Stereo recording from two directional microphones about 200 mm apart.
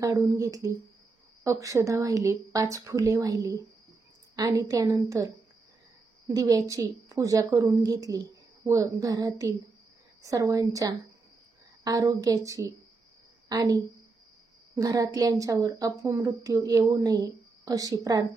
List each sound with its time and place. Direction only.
0.0 s a woman's voice: 15° right (ahead or behind)
14.8 s a woman's voice: 20° right (ahead or behind)